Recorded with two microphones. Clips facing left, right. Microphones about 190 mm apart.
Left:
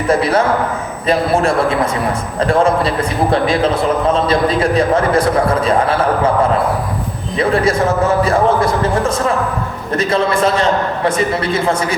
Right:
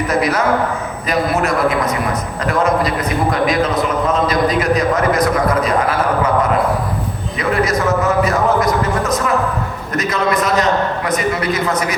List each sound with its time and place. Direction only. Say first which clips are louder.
0.1 s a man's voice: left 4 dB; 30° left (ahead or behind)
7.3 s a man's voice: left 3 dB; 30° left (ahead or behind)